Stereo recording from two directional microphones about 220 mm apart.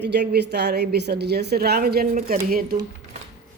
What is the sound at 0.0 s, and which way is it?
A woman's voice, 50° right (ahead or behind).